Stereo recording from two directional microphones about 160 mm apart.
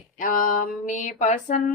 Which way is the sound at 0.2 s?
60° left (ahead or behind).